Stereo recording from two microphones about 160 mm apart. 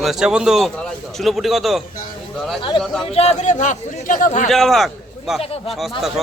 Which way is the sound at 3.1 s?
45° left (ahead or behind).